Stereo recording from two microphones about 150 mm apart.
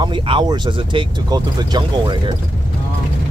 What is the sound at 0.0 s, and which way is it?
Speech, 30° right (ahead or behind).